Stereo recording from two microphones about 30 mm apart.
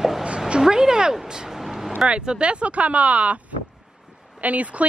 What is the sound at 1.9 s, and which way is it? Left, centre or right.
Speech, right.